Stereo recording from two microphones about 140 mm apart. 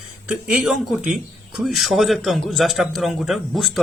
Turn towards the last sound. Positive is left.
turn(degrees=0)  # may be behind; listen again after turning